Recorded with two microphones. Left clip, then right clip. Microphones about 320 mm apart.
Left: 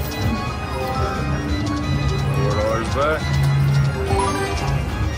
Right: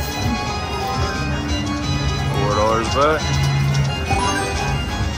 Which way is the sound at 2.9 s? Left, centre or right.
Centre.